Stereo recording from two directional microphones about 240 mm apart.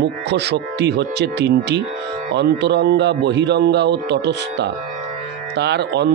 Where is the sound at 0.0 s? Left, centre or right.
Right.